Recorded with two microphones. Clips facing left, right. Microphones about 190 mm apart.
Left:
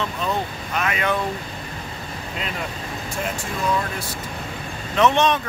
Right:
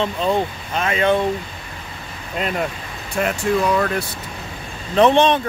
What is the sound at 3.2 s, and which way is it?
Speech, 65° right (ahead or behind).